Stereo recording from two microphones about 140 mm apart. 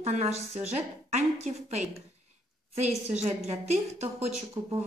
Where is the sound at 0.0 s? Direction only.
50° right (ahead or behind).